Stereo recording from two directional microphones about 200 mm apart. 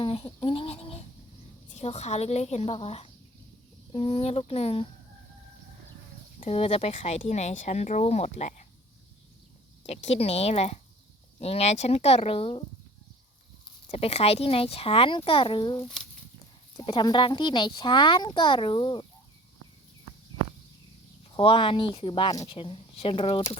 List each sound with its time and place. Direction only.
0.0 s a sound: 25° left (ahead or behind)
1.8 s speech: 35° left (ahead or behind)
6.4 s speech: 30° left (ahead or behind)
9.8 s speech: 35° left (ahead or behind)
13.8 s speech: 30° left (ahead or behind)
21.3 s speech: 25° left (ahead or behind)